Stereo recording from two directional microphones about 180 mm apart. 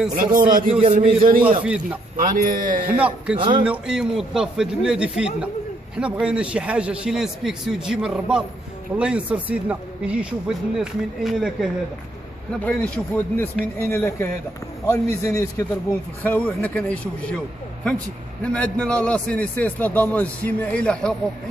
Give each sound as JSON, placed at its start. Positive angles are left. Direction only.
{"t": 0.1, "sound": "a man's voice", "side_deg": -50}
{"t": 1.6, "sound": "speech", "side_deg": -10}
{"t": 2.1, "sound": "a man's voice", "side_deg": -50}
{"t": 3.3, "sound": "speech", "side_deg": -30}
{"t": 3.6, "sound": "a man's voice", "side_deg": -5}